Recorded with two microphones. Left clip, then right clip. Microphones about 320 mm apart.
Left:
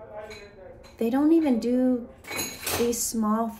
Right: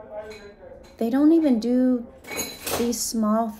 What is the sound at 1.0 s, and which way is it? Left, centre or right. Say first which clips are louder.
A woman's voice: right 3 dB; centre.